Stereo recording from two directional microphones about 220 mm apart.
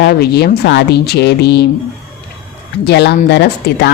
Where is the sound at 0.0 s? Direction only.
45° left (ahead or behind).